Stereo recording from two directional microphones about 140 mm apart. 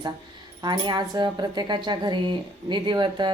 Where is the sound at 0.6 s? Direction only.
30° right (ahead or behind).